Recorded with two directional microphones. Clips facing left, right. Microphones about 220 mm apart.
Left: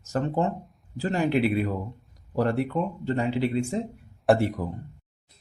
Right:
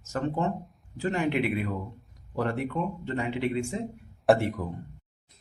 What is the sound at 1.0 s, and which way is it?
Speech, 35° left (ahead or behind).